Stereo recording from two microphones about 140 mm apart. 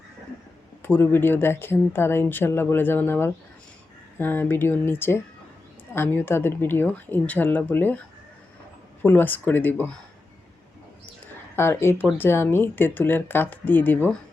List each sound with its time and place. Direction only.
0.8 s speech: 15° left (ahead or behind)
9.0 s speech: 15° left (ahead or behind)
11.5 s speech: 20° left (ahead or behind)